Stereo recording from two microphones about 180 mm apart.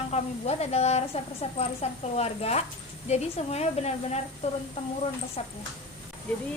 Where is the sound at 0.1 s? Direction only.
35° left (ahead or behind).